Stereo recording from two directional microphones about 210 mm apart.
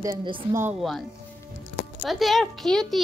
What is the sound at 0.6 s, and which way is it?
A woman's voice, 5° right (ahead or behind).